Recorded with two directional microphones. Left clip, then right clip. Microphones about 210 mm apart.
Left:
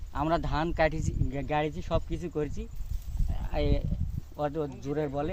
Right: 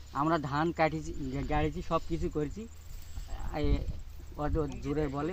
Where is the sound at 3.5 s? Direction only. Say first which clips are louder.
Left 4 dB; 35° left (ahead or behind).